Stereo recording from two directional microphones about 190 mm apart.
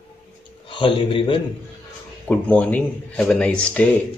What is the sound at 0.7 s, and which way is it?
Speech, 25° left (ahead or behind).